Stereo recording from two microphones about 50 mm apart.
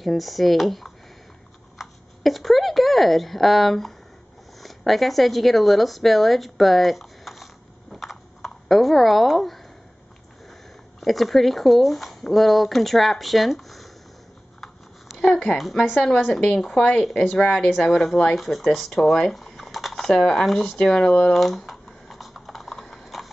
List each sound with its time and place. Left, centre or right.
0.0 s speech: centre
7.9 s a sound: centre
11.0 s speech: centre
15.1 s speech: centre
15.5 s speech: centre
15.9 s speech: centre
21.3 s computer keyboard: centre